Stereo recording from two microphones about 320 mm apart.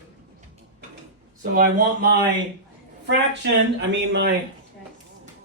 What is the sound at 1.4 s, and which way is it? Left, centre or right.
Speech, right.